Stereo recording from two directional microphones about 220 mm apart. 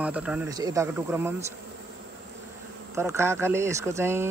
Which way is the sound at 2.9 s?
10° right (ahead or behind).